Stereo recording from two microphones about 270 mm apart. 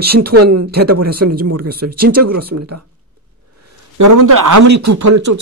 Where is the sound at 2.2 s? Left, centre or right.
Right.